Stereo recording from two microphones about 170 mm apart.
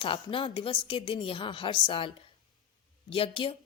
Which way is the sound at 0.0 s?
30° left (ahead or behind).